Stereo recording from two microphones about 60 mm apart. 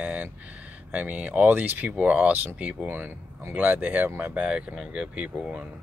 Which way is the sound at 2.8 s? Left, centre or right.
Right.